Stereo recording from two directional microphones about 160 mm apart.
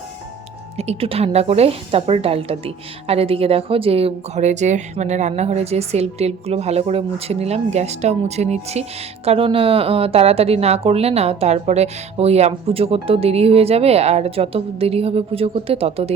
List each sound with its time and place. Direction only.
0.8 s a woman's voice: 40° right (ahead or behind)